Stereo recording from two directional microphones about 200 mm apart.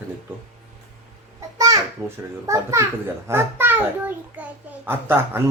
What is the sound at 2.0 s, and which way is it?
A child's voice, 15° right (ahead or behind).